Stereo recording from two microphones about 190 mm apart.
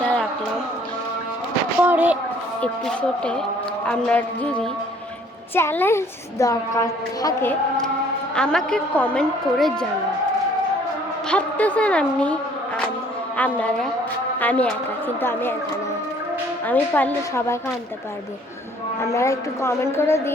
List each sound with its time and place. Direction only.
0.0 s music: 5° left (ahead or behind)
1.8 s a sound: 10° right (ahead or behind)
2.6 s a woman's voice: 5° left (ahead or behind)
8.4 s a woman's voice: 5° left (ahead or behind)
11.3 s a woman's voice: 5° left (ahead or behind)
16.6 s a woman's voice: 10° left (ahead or behind)
19.1 s a woman's voice: 15° left (ahead or behind)